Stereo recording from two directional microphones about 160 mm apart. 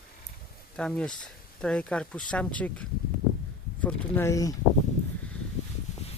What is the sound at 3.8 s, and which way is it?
Speech, 10° left (ahead or behind).